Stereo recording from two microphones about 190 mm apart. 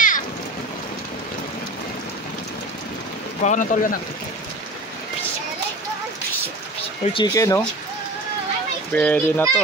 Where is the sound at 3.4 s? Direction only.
40° left (ahead or behind).